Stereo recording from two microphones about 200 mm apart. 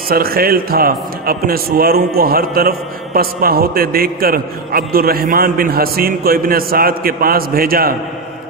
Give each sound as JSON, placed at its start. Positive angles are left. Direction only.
{"t": 0.1, "sound": "a man's voice", "side_deg": -50}